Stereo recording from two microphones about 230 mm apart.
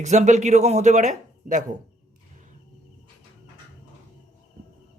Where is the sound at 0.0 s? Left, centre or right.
Right.